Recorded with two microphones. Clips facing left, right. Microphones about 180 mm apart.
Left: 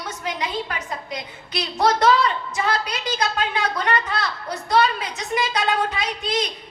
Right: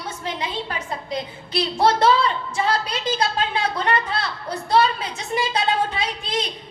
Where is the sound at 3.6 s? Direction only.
30° right (ahead or behind).